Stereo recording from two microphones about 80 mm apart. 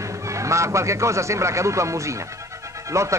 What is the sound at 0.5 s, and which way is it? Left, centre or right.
A man's voice, right.